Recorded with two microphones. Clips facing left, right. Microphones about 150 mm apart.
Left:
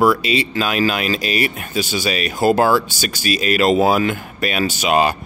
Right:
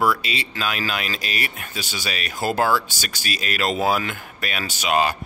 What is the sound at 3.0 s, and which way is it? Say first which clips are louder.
Speech: left 9 dB; 10° left (ahead or behind).